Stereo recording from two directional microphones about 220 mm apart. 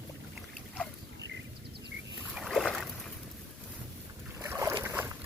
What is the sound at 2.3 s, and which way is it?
Boat, centre (ahead or behind).